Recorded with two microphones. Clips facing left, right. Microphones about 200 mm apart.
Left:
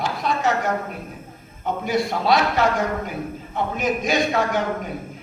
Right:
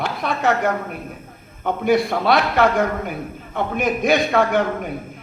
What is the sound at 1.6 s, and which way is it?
A man's voice, 60° right (ahead or behind).